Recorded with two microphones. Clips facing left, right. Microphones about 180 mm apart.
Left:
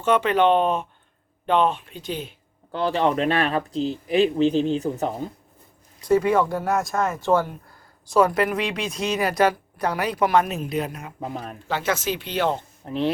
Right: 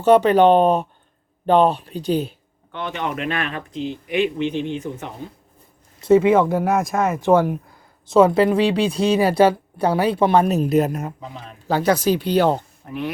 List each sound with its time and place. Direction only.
0.0 s speech: 40° right (ahead or behind)
2.7 s speech: 35° left (ahead or behind)
6.0 s speech: 25° right (ahead or behind)
6.7 s speech: centre (ahead or behind)
8.1 s speech: 25° right (ahead or behind); by 11.1 s 45° right (ahead or behind)
11.2 s speech: 50° left (ahead or behind)
11.7 s speech: 35° right (ahead or behind)
12.8 s speech: 30° left (ahead or behind)